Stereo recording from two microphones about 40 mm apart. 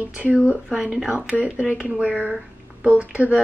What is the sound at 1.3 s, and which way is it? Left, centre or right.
Speech, right.